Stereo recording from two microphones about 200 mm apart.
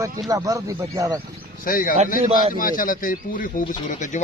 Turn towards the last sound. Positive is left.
turn(degrees=35)  # may be behind; listen again after turning